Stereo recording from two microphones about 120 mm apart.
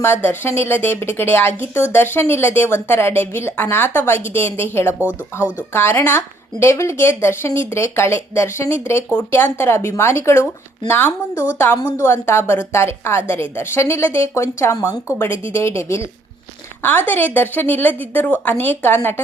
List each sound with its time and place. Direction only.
0.0 s a woman's voice: 15° left (ahead or behind)
11.8 s a woman's voice: 35° left (ahead or behind)
12.0 s a woman's voice: 20° left (ahead or behind)